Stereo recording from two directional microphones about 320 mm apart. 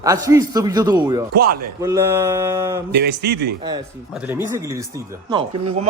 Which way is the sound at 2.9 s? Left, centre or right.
Right.